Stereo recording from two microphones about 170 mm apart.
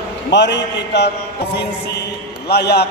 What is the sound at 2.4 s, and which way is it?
Speech, 75° left (ahead or behind).